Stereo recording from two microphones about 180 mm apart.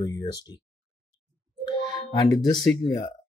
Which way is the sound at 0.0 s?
20° left (ahead or behind).